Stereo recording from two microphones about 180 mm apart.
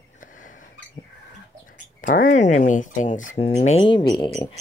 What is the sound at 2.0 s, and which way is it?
Speech, 50° left (ahead or behind).